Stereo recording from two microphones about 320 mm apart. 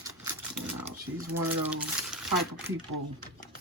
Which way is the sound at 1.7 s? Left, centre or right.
Centre.